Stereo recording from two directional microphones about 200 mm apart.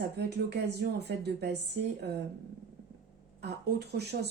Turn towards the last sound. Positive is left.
turn(degrees=-55)  # may be behind; listen again after turning